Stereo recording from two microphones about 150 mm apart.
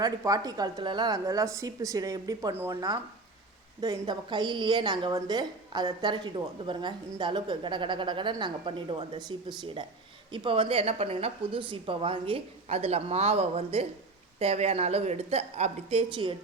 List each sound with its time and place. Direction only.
0.0 s a woman's voice: 25° right (ahead or behind)
3.8 s a woman's voice: 25° right (ahead or behind)
10.3 s a woman's voice: 35° right (ahead or behind)